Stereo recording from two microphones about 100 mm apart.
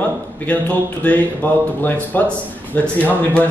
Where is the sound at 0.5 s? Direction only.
15° left (ahead or behind).